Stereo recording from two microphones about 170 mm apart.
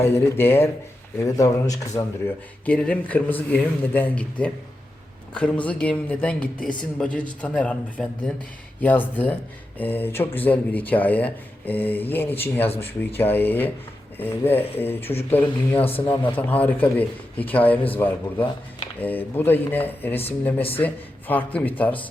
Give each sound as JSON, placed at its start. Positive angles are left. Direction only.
{"t": 0.3, "sound": "a man's voice", "side_deg": 15}